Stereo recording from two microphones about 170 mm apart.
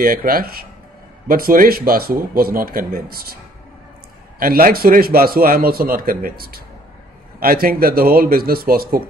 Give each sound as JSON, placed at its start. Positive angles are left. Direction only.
{"t": 0.0, "sound": "a man's voice", "side_deg": -55}
{"t": 4.4, "sound": "a man's voice", "side_deg": -60}